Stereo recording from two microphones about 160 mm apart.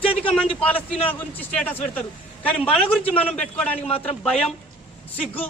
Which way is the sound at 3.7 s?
35° left (ahead or behind).